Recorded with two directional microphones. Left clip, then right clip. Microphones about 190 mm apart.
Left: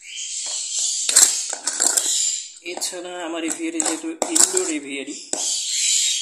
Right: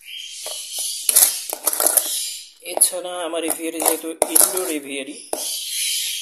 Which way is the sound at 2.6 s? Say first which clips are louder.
Right 6 dB; 35° right (ahead or behind).